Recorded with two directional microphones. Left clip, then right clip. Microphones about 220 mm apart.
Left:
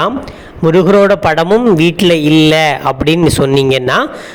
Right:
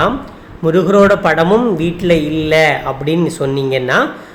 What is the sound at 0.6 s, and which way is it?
A man's voice, 35° left (ahead or behind).